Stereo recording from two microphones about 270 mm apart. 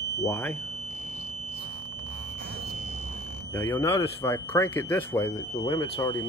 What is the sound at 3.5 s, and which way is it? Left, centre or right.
Speech, centre.